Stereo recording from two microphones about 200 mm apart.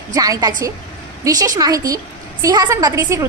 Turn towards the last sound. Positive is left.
turn(degrees=-15)  # may be behind; listen again after turning